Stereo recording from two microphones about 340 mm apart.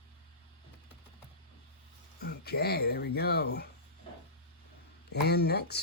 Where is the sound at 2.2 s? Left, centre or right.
Left.